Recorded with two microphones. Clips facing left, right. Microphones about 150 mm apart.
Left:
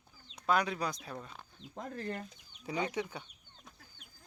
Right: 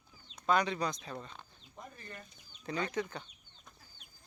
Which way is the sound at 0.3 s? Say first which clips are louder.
Right 1 dB; 5° left (ahead or behind).